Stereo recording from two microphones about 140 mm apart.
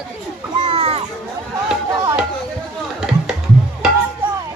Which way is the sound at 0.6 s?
45° right (ahead or behind).